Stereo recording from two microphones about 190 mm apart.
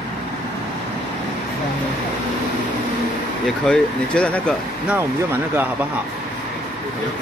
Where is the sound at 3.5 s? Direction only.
5° left (ahead or behind).